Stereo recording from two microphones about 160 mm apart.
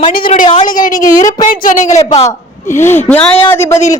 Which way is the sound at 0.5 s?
25° left (ahead or behind).